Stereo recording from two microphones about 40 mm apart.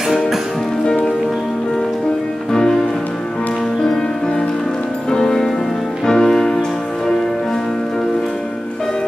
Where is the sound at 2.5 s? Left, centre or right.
Centre.